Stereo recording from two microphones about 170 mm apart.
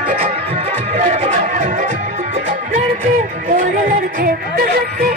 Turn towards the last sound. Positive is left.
turn(degrees=-60)  # may be behind; listen again after turning